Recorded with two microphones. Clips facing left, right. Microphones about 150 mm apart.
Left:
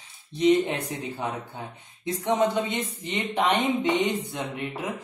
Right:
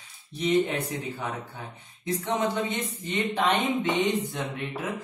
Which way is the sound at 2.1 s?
15° left (ahead or behind).